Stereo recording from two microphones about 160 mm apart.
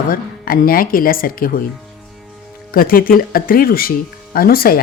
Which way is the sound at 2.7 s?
65° left (ahead or behind).